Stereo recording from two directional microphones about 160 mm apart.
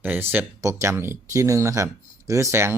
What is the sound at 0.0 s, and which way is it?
Speech, 10° right (ahead or behind).